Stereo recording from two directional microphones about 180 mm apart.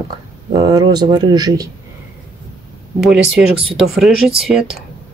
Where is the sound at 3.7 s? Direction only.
Centre (ahead or behind).